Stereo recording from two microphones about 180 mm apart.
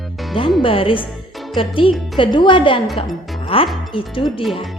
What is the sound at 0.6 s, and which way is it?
A woman's voice, 30° left (ahead or behind).